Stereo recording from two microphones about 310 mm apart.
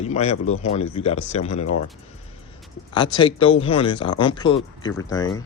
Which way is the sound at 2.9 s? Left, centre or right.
Centre.